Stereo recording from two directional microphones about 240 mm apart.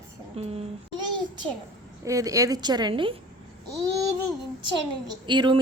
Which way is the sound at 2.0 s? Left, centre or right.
Centre.